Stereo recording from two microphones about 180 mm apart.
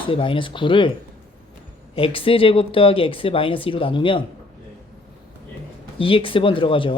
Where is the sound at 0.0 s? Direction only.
30° left (ahead or behind).